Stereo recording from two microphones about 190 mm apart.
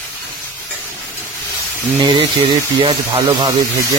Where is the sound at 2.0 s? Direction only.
25° right (ahead or behind).